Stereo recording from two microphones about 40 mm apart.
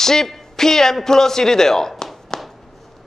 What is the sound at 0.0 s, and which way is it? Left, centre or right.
A man's voice, centre.